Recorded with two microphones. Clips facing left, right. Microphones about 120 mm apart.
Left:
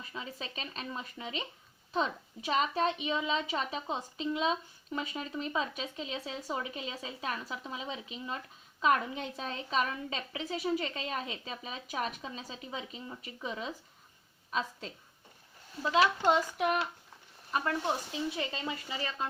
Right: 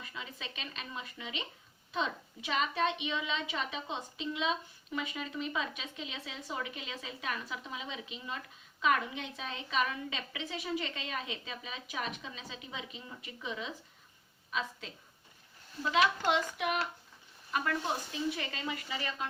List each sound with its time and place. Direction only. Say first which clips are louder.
0.0 s a woman's voice: left 3 dB; 35° left (ahead or behind)
15.8 s a woman's voice: left 2 dB; 35° left (ahead or behind)
17.5 s a woman's voice: left 2 dB; 25° left (ahead or behind)